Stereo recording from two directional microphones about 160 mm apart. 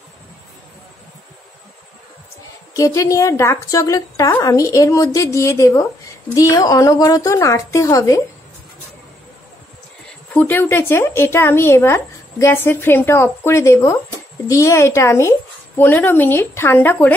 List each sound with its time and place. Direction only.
2.7 s a woman's voice: 20° left (ahead or behind)
10.3 s speech: 10° left (ahead or behind)